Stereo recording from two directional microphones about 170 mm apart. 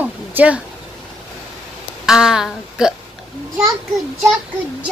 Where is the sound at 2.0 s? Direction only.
5° right (ahead or behind).